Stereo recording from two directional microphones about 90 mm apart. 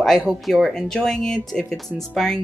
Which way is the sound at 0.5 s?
Centre (ahead or behind).